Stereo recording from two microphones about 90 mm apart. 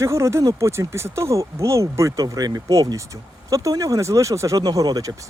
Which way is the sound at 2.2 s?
45° right (ahead or behind).